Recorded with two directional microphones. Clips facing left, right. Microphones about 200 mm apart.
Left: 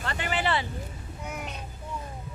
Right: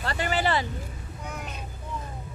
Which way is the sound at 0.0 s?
40° right (ahead or behind).